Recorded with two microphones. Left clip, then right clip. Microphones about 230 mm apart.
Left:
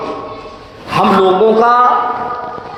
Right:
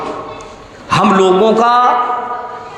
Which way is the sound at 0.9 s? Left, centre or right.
Right.